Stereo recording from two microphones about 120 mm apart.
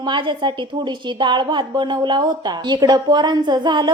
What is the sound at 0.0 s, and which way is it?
A woman's voice, 40° right (ahead or behind).